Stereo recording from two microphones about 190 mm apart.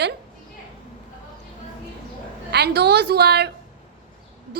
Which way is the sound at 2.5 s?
60° right (ahead or behind).